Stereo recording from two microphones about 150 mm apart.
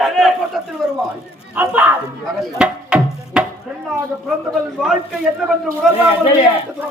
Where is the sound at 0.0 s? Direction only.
Centre (ahead or behind).